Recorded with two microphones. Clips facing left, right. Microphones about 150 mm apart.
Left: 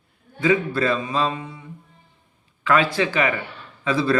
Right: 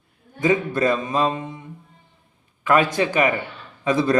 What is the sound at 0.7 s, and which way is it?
Speech, 20° right (ahead or behind).